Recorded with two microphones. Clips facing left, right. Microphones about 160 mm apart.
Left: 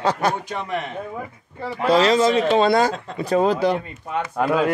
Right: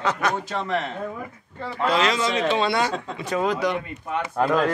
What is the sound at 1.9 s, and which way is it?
Speech, 35° left (ahead or behind).